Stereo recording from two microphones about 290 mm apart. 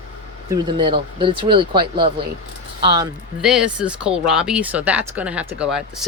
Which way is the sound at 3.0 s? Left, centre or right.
Centre.